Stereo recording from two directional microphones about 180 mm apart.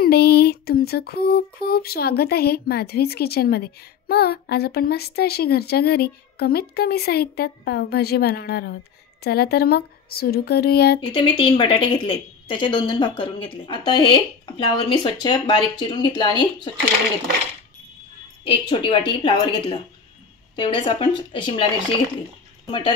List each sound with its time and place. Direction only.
0.0 s a sound: 60° left (ahead or behind)
11.0 s speech: 25° left (ahead or behind)
18.5 s speech: 25° left (ahead or behind)
22.7 s speech: 30° left (ahead or behind)